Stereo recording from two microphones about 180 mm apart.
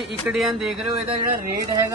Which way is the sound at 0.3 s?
5° right (ahead or behind).